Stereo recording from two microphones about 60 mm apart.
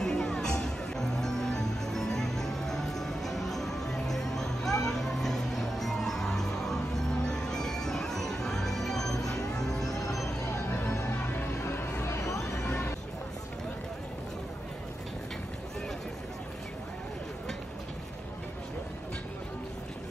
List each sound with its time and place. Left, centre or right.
0.0 s music: centre
9.1 s music: left
9.6 s music: centre
10.2 s music: left
12.0 s a sound: left